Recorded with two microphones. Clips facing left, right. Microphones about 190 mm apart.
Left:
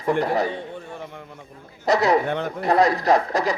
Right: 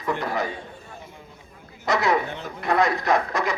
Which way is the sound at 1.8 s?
35° left (ahead or behind).